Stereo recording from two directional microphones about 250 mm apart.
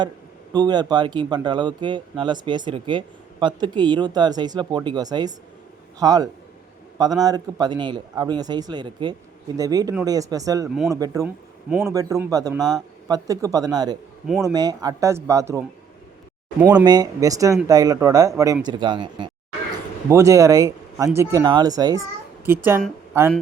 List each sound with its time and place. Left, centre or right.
0.5 s a woman's voice: centre